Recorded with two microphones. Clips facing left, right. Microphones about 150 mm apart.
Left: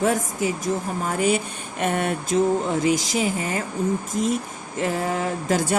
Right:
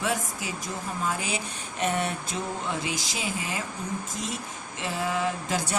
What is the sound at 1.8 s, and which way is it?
Speech, 55° left (ahead or behind).